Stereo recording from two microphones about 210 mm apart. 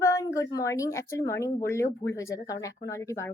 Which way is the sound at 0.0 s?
15° left (ahead or behind).